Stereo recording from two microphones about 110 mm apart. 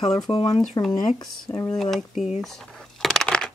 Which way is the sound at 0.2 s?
35° left (ahead or behind).